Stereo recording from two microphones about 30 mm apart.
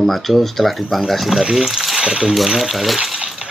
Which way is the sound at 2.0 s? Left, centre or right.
Right.